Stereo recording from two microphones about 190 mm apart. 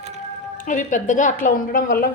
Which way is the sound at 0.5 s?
45° left (ahead or behind).